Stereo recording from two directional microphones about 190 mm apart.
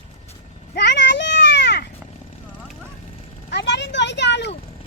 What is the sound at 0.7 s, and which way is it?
Children playing, 65° left (ahead or behind).